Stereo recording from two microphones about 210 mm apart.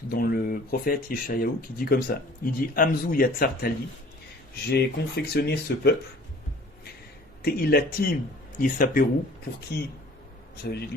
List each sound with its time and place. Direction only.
0.1 s speech: 45° left (ahead or behind)
4.7 s speech: 50° left (ahead or behind)
7.4 s speech: 45° left (ahead or behind)
10.6 s speech: 50° left (ahead or behind)